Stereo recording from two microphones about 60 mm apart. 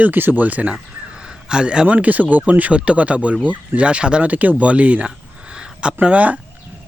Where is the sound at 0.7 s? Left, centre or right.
Centre.